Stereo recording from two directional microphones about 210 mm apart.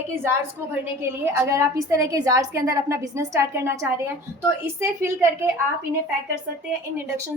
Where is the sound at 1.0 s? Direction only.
10° right (ahead or behind).